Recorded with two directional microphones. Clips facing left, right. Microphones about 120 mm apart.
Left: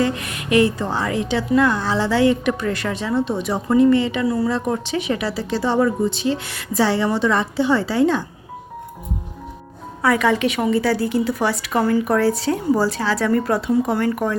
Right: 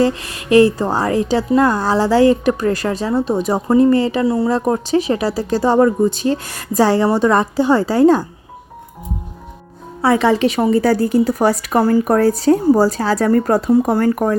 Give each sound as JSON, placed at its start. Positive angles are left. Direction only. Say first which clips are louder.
{"t": 0.0, "sound": "a woman's voice", "louder": "right 5 dB", "side_deg": -30}
{"t": 10.0, "sound": "a woman's voice", "louder": "right 4 dB", "side_deg": -30}